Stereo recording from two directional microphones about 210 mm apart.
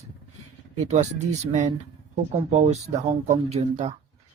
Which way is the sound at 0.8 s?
35° right (ahead or behind).